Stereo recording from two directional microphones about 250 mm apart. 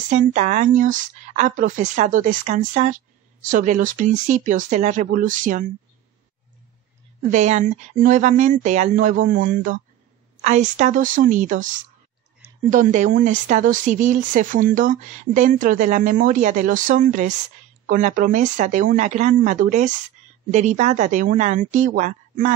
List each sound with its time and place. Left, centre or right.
0.1 s speech: right
7.2 s speech: right